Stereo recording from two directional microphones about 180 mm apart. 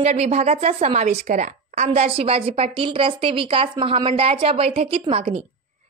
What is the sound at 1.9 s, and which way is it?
A woman's voice, 35° right (ahead or behind).